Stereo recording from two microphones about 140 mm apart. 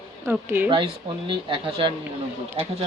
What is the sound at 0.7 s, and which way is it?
Speech, 35° right (ahead or behind).